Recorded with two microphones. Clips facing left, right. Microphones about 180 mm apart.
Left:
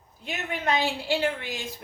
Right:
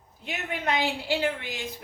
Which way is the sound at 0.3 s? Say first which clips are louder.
Left 1 dB; 15° right (ahead or behind).